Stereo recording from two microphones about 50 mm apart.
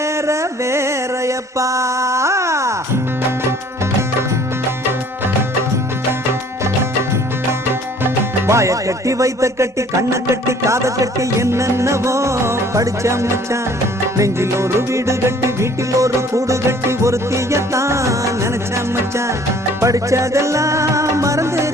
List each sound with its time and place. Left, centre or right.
0.0 s a sound: right
4.9 s music: right
8.4 s music: right
19.8 s music: right